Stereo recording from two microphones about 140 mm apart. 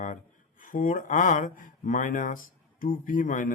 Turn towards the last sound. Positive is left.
turn(degrees=70)  # may be behind; listen again after turning